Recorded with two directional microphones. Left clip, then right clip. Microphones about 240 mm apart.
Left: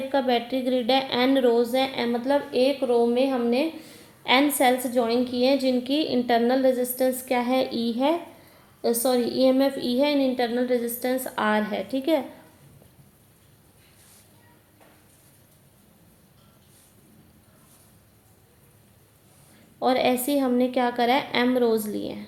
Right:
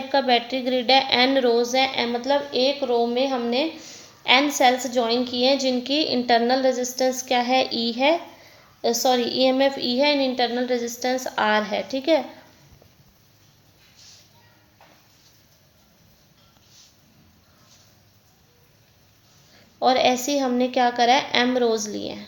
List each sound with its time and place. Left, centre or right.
0.1 s a woman's voice: right
19.8 s a woman's voice: centre